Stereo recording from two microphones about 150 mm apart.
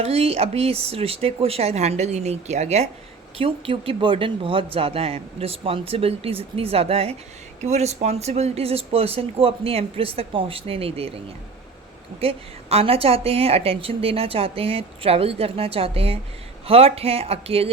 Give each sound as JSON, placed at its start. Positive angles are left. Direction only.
{"t": 0.0, "sound": "a woman's voice", "side_deg": -40}
{"t": 12.2, "sound": "a woman's voice", "side_deg": -40}